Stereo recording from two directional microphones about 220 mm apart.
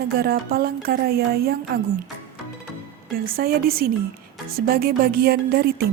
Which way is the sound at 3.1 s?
40° right (ahead or behind).